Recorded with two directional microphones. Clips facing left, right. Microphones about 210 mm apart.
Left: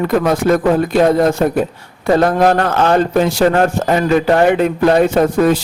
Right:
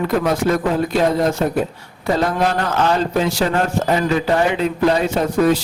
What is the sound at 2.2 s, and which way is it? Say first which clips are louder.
A man's voice: left 6 dB; 55° left (ahead or behind).